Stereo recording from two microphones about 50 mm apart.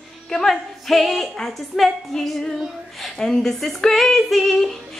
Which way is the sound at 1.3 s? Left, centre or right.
Centre.